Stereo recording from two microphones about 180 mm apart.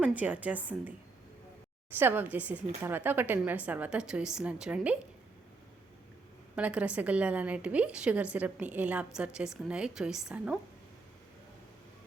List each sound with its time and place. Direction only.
0.0 s a woman's voice: 10° right (ahead or behind)
2.0 s a woman's voice: 10° right (ahead or behind)
6.6 s a woman's voice: 5° right (ahead or behind)